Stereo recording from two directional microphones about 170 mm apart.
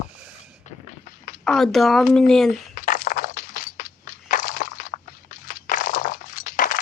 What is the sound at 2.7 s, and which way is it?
Crushing, 50° left (ahead or behind).